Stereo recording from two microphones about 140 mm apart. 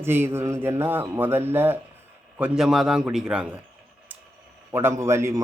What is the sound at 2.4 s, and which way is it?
A man's voice, 5° right (ahead or behind).